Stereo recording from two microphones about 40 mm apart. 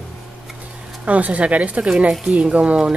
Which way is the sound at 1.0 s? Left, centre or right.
Right.